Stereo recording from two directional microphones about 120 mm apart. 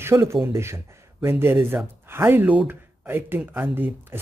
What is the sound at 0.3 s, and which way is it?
Speech, 20° right (ahead or behind).